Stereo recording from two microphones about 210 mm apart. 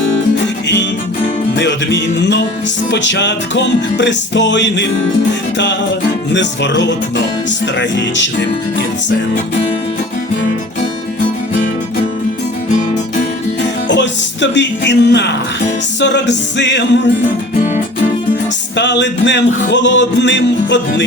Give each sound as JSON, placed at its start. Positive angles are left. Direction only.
{"t": 1.5, "sound": "music", "side_deg": 55}
{"t": 6.3, "sound": "music", "side_deg": 55}
{"t": 13.8, "sound": "music", "side_deg": 60}
{"t": 18.8, "sound": "music", "side_deg": 55}